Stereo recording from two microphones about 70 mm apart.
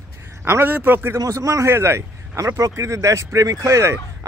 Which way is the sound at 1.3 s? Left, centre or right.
Right.